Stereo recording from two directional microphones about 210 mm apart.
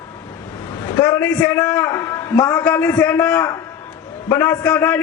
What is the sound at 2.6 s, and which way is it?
A man's voice, 5° left (ahead or behind).